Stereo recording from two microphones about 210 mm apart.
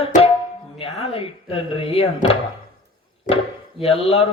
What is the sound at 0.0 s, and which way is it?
Tabla, 30° left (ahead or behind).